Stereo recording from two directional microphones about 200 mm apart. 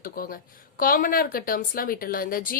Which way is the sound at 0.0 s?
45° left (ahead or behind).